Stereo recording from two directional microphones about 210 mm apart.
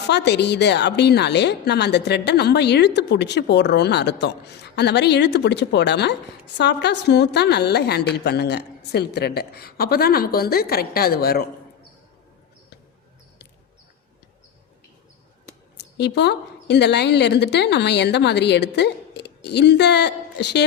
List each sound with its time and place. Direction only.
0.1 s a woman's voice: 55° left (ahead or behind)
16.0 s a woman's voice: 55° left (ahead or behind)